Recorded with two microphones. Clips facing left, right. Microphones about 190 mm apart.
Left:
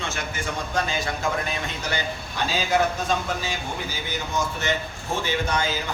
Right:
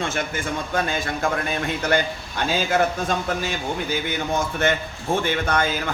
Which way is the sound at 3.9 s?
55° right (ahead or behind).